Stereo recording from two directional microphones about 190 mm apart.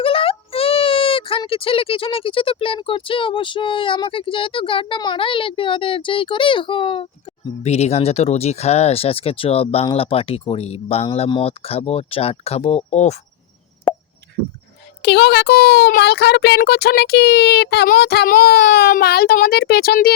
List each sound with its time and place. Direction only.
0.0 s speech: 30° left (ahead or behind)
15.0 s a child's voice: 60° left (ahead or behind)